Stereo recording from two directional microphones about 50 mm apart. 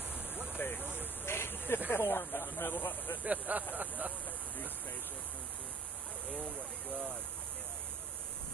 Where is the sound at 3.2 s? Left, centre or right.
Right.